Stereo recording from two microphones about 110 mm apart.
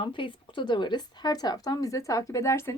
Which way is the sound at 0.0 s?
50° left (ahead or behind).